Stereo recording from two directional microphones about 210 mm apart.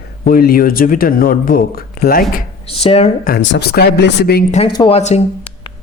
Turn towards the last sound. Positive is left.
turn(degrees=30)  # may be behind; listen again after turning